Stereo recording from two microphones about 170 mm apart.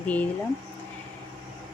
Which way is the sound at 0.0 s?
10° left (ahead or behind).